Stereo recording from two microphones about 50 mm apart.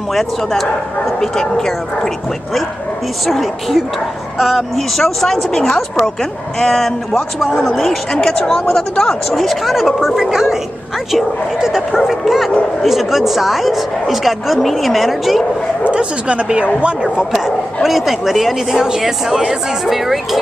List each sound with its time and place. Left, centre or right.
0.1 s speech: centre
3.3 s speech: centre
4.7 s speech: centre
15.9 s speech: right
17.2 s speech: centre